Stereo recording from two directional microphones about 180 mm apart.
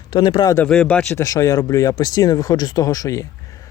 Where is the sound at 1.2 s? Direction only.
20° left (ahead or behind).